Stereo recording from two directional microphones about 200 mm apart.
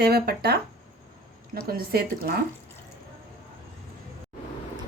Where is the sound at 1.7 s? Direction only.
50° right (ahead or behind).